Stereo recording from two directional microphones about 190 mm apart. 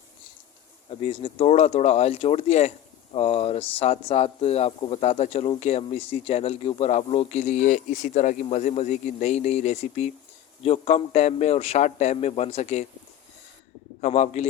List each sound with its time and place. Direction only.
0.9 s speech: 30° left (ahead or behind)
14.0 s speech: 35° left (ahead or behind)